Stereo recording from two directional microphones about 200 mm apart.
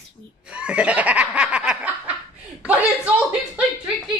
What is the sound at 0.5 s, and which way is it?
Laughter, 5° right (ahead or behind).